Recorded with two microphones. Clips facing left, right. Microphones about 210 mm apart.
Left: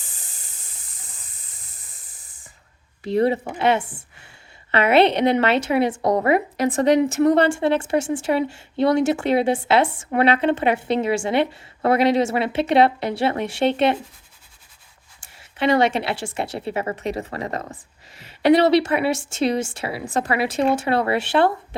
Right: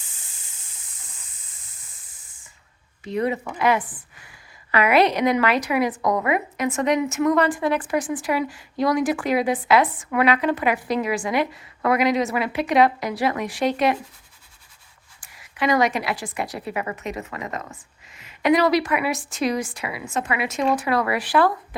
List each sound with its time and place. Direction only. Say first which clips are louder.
0.0 s hiss: left 4 dB; 40° left (ahead or behind)
2.0 s spray: left 4 dB; 65° left (ahead or behind)
3.0 s a woman's voice: left 5 dB; 35° left (ahead or behind)
15.2 s a woman's voice: left 2 dB; 30° left (ahead or behind)